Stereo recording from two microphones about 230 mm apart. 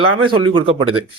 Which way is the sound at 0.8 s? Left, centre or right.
Right.